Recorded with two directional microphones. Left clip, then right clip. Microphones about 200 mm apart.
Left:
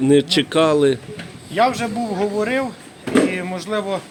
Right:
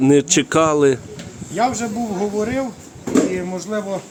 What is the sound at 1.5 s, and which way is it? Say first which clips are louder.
Speech: left 2 dB; centre (ahead or behind).